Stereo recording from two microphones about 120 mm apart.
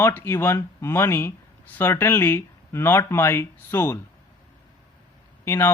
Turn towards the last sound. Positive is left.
turn(degrees=20)  # may be behind; listen again after turning